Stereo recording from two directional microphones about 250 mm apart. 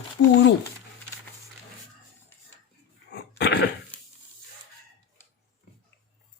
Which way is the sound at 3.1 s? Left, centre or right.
Left.